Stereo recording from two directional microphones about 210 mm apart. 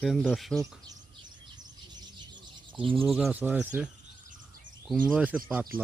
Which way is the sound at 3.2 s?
10° right (ahead or behind).